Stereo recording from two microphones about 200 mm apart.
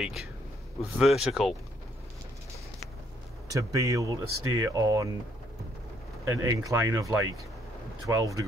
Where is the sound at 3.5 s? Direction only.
15° right (ahead or behind).